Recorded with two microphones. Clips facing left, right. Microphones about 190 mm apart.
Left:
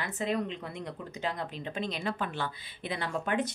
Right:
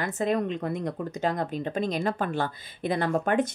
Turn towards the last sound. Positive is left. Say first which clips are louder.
# right 7 dB
turn(degrees=-50)  # may be behind; listen again after turning